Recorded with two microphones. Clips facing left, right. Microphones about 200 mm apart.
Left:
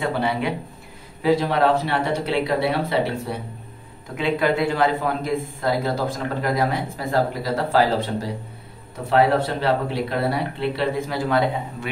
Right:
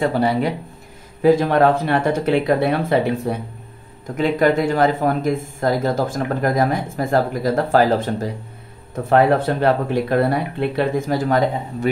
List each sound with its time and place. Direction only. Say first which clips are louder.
0.0 s speech: right 5 dB; 40° right (ahead or behind)